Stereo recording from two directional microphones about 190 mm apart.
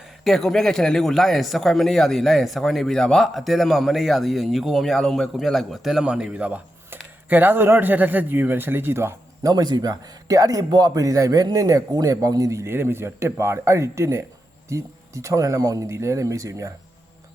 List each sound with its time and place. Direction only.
0.3 s speech: centre (ahead or behind); by 16.7 s 15° right (ahead or behind)